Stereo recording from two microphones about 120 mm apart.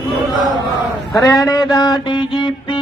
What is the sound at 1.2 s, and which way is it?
Mantra, 25° left (ahead or behind).